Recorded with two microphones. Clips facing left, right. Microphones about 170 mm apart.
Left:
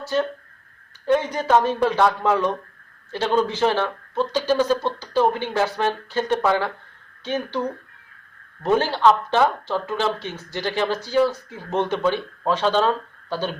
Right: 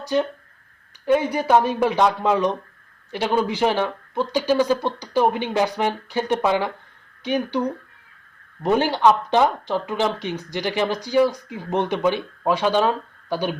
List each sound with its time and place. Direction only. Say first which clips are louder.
0.0 s speech: right 1 dB; 15° right (ahead or behind)